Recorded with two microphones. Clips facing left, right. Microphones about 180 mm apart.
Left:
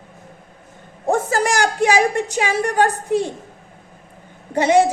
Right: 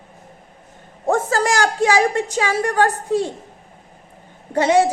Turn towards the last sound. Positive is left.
turn(degrees=15)  # may be behind; listen again after turning